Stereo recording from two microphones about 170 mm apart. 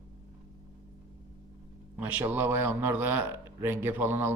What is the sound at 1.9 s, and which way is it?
A man's voice, 10° right (ahead or behind).